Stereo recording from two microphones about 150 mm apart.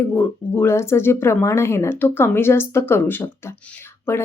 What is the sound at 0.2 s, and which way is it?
A woman's voice, 15° left (ahead or behind).